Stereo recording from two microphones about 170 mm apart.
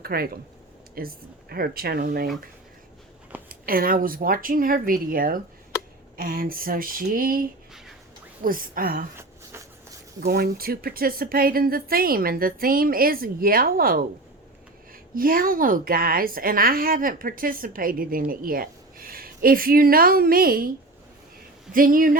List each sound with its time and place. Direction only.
0.0 s a woman's voice: 65° right (ahead or behind)
3.5 s a woman's voice: 60° right (ahead or behind)
8.4 s a woman's voice: 55° right (ahead or behind)
10.2 s a woman's voice: 65° right (ahead or behind)
15.1 s a woman's voice: 55° right (ahead or behind)
21.7 s speech: 55° right (ahead or behind)